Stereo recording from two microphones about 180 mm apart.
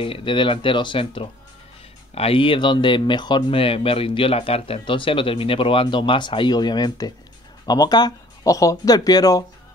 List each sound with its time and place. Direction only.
0.0 s speech: 30° left (ahead or behind)